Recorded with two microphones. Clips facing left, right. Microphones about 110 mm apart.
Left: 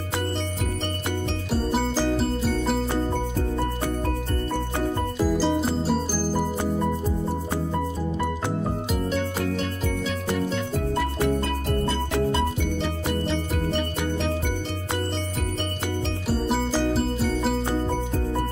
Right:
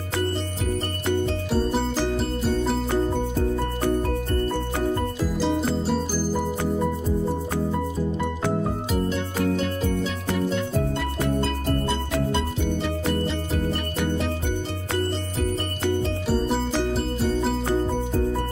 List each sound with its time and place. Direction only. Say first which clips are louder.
5.4 s music: even; centre (ahead or behind)